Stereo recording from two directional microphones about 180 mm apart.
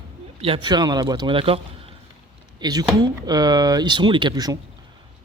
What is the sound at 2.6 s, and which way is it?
Speech, 20° right (ahead or behind).